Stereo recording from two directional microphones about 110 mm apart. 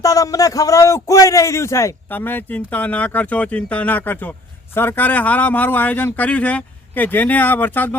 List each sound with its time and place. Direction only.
0.0 s a man's voice: 30° left (ahead or behind); by 7.9 s 15° left (ahead or behind)